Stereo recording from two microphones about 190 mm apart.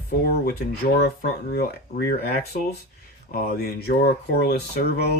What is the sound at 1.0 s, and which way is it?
Speech, 55° left (ahead or behind).